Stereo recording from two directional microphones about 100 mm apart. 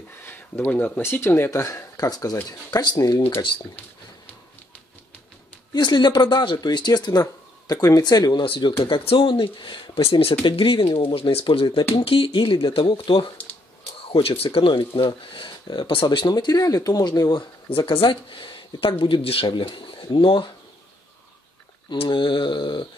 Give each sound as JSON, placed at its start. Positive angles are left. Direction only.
{"t": 0.2, "sound": "speech", "side_deg": 20}
{"t": 5.7, "sound": "speech", "side_deg": 50}
{"t": 8.7, "sound": "speech", "side_deg": 65}
{"t": 10.4, "sound": "speech", "side_deg": 60}
{"t": 19.4, "sound": "speech", "side_deg": 55}
{"t": 21.9, "sound": "speech", "side_deg": 60}